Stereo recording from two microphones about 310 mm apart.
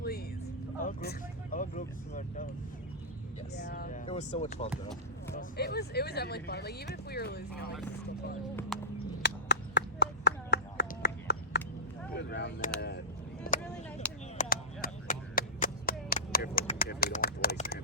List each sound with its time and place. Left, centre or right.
0.8 s speech: left
3.6 s speech: left
8.7 s a sound: centre
9.2 s a sound: left
12.1 s speech: left
13.5 s vehicle: left
14.3 s chop: left